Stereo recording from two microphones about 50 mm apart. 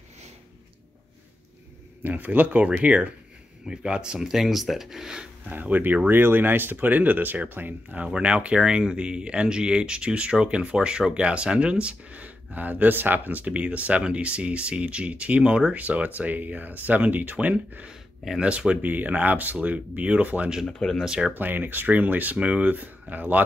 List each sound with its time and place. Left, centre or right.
2.0 s speech: right; by 5.3 s centre
5.5 s speech: right
8.2 s speech: right
20.6 s speech: centre
21.0 s speech: centre
21.4 s speech: right